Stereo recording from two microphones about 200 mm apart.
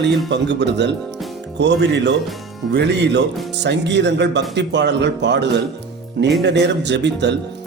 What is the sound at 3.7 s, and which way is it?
Speech, 60° right (ahead or behind).